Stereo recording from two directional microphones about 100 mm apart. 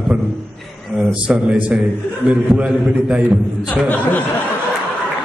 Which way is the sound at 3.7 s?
15° left (ahead or behind).